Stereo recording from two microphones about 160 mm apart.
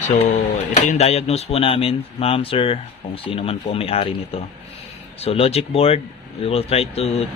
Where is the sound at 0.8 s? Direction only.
45° left (ahead or behind).